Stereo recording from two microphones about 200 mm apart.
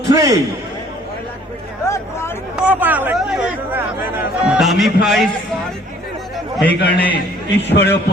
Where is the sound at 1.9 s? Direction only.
15° left (ahead or behind).